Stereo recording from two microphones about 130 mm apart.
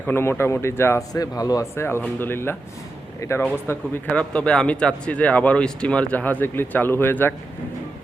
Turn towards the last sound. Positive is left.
turn(degrees=15)  # may be behind; listen again after turning